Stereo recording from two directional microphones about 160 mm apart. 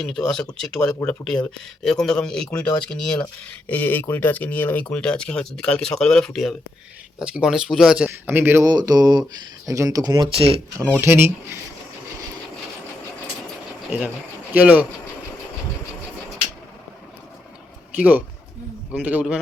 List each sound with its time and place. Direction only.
0.0 s speech: 5° left (ahead or behind); by 8.7 s 15° right (ahead or behind)
8.9 s speech: 25° right (ahead or behind)
11.0 s speech: 15° right (ahead or behind)
14.5 s speech: 10° right (ahead or behind)
17.9 s speech: 10° right (ahead or behind)